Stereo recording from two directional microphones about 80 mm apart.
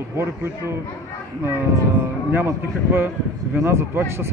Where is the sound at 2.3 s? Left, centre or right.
Right.